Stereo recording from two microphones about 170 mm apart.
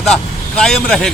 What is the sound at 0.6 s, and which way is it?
Speech, centre (ahead or behind).